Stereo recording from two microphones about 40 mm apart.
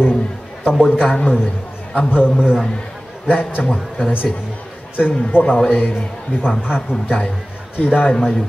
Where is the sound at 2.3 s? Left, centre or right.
Left.